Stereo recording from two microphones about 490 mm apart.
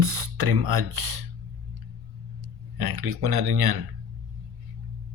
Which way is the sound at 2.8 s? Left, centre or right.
Right.